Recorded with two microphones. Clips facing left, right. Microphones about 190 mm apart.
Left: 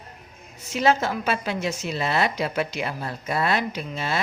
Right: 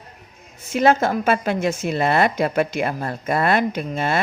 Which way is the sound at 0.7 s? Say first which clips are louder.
Right 5 dB; 55° right (ahead or behind).